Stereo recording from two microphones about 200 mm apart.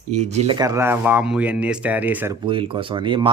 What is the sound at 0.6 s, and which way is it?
Speech, 15° right (ahead or behind).